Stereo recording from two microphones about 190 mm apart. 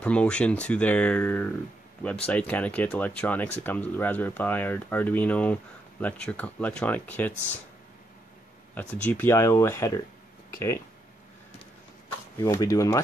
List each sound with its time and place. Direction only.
0.0 s speech: 5° left (ahead or behind)
8.7 s speech: 10° left (ahead or behind)
12.4 s speech: 15° left (ahead or behind)